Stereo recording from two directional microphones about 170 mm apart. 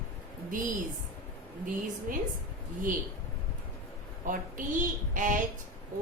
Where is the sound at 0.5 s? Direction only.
50° right (ahead or behind).